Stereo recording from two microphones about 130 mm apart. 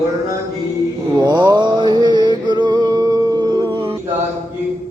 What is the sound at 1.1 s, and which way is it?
Music, 35° right (ahead or behind).